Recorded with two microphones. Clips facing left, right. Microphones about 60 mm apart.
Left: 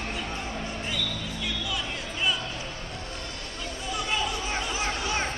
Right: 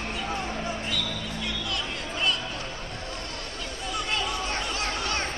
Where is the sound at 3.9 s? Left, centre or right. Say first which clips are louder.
Even; centre.